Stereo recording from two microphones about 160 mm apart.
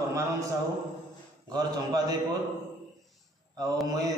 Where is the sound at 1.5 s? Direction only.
25° right (ahead or behind).